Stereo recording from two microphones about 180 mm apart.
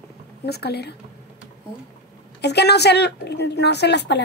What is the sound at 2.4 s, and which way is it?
Speech, 70° left (ahead or behind).